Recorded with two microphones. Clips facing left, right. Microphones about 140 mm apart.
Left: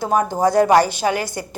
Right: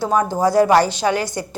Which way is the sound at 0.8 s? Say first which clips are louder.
Right 1 dB; 15° left (ahead or behind).